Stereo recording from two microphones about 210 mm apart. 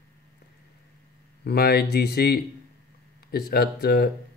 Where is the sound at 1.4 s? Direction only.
50° left (ahead or behind).